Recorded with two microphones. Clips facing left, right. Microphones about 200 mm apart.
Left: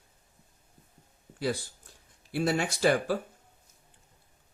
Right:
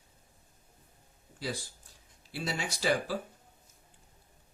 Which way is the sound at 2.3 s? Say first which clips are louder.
Left 8 dB; 55° left (ahead or behind).